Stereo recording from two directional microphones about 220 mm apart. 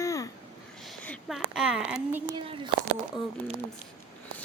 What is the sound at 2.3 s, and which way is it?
Speech, 20° right (ahead or behind).